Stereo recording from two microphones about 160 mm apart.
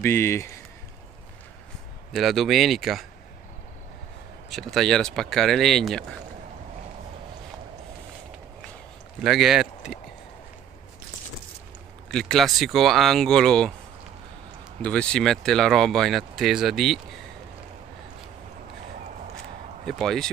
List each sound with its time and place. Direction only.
0.0 s speech: 15° left (ahead or behind)
2.1 s speech: centre (ahead or behind)
4.5 s speech: centre (ahead or behind)
9.2 s speech: 5° right (ahead or behind)
12.1 s speech: centre (ahead or behind)
14.8 s speech: 5° left (ahead or behind)
19.9 s speech: centre (ahead or behind)